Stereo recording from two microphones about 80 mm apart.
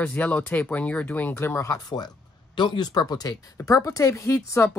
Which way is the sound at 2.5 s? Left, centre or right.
Left.